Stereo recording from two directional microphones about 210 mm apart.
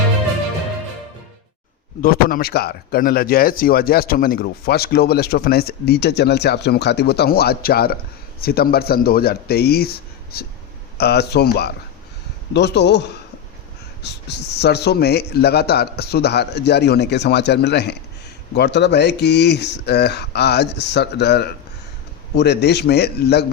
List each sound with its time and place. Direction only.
2.0 s speech: 45° left (ahead or behind)